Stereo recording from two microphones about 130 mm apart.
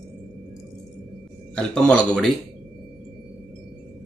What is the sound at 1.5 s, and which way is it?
Speech, 5° left (ahead or behind).